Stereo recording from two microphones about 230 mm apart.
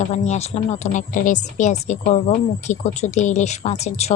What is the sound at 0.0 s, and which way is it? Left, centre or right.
A woman's voice, left.